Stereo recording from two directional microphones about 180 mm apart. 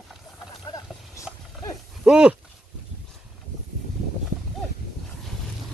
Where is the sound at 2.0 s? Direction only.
5° right (ahead or behind).